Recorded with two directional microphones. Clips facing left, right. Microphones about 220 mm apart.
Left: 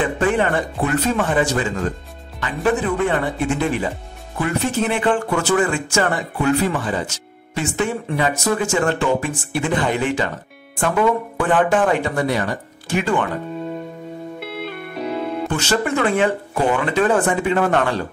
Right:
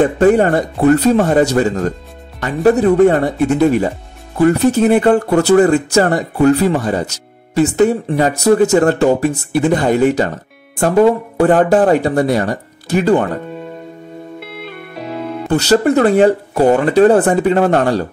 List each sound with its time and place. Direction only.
0.0 s speech: 40° right (ahead or behind)
15.5 s speech: 35° right (ahead or behind)